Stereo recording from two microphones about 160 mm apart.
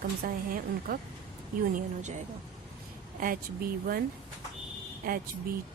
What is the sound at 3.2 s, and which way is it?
Speech, 65° right (ahead or behind).